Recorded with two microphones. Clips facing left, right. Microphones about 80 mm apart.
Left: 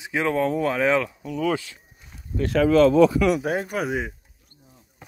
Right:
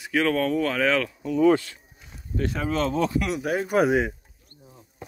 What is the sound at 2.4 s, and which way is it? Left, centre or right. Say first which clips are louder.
Speech: left 8 dB; left.